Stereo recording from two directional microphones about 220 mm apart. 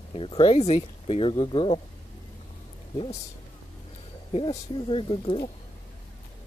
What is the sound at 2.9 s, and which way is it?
Speech, 25° left (ahead or behind).